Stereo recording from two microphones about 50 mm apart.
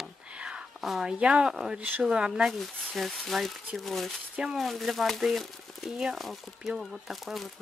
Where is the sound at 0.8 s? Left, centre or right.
Centre.